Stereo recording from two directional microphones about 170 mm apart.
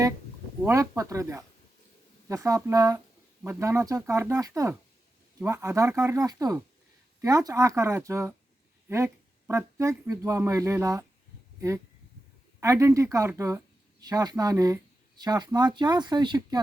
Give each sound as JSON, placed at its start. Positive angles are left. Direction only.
{"t": 0.6, "sound": "speech", "side_deg": -15}
{"t": 12.5, "sound": "speech", "side_deg": -15}